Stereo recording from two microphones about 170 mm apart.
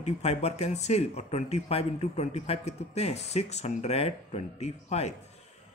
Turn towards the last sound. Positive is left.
turn(degrees=40)  # may be behind; listen again after turning